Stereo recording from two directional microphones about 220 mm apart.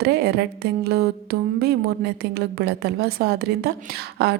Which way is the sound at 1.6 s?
45° right (ahead or behind).